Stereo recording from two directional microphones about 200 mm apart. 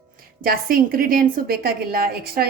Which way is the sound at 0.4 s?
45° right (ahead or behind).